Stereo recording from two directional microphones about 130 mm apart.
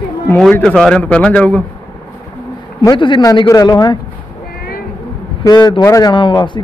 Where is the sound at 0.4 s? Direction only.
5° left (ahead or behind).